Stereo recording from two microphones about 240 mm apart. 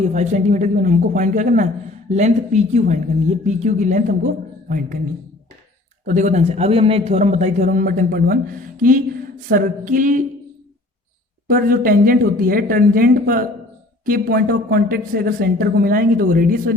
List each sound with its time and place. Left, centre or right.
0.0 s speech: right
6.1 s a man's voice: right
11.4 s speech: right